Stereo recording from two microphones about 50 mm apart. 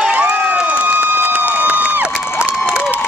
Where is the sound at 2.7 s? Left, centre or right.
Right.